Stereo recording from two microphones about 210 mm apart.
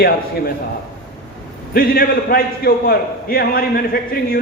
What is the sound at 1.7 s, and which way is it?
A man's voice, 45° left (ahead or behind).